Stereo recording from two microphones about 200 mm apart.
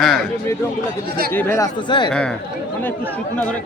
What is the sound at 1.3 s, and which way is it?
Speech, 15° left (ahead or behind).